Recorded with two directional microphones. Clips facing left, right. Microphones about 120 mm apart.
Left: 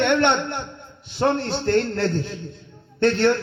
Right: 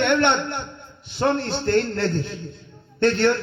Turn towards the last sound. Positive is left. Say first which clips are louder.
# left 1 dB
turn(degrees=35)  # may be behind; listen again after turning